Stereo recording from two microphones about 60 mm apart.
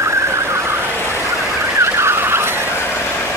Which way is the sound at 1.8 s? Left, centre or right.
Right.